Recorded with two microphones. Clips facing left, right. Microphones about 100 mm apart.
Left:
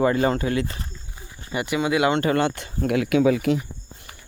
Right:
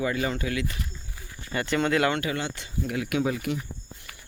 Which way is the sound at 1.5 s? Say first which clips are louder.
Left 2 dB; 15° left (ahead or behind).